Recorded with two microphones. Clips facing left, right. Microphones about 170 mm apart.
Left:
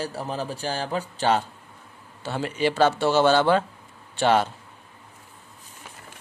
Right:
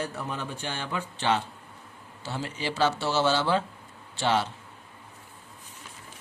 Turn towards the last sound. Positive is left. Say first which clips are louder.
# left 5 dB
turn(degrees=55)  # may be behind; listen again after turning